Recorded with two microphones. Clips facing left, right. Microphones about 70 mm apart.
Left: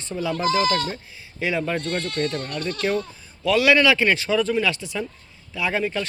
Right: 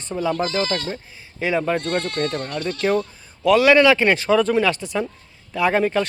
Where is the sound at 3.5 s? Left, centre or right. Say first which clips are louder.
Right 4 dB; right.